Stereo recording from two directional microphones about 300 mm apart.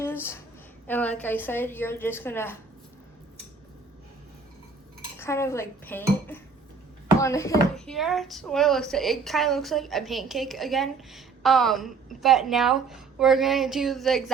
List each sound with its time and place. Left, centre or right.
0.0 s a sound: centre
0.9 s a woman's voice: centre
5.1 s a woman's voice: centre
7.9 s a woman's voice: centre